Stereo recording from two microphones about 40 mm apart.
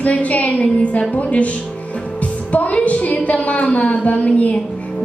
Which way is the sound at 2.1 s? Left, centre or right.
Left.